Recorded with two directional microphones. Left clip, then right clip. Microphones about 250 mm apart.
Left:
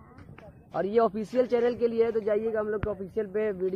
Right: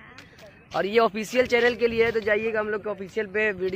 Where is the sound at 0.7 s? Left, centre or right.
Centre.